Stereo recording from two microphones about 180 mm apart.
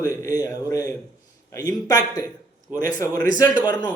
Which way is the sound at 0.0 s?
20° left (ahead or behind).